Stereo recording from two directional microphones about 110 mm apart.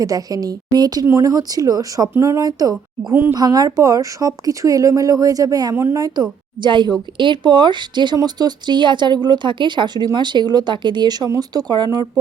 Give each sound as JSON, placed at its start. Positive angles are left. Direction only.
{"t": 0.0, "sound": "speech", "side_deg": -35}
{"t": 3.1, "sound": "speech", "side_deg": -20}
{"t": 3.3, "sound": "speech", "side_deg": -35}
{"t": 5.7, "sound": "speech", "side_deg": -25}
{"t": 6.6, "sound": "speech", "side_deg": -45}